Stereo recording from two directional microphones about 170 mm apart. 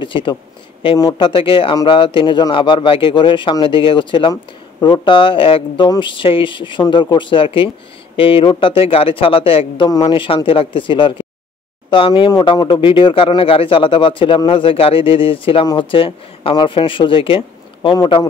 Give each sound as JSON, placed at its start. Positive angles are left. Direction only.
{"t": 0.0, "sound": "speech", "side_deg": 30}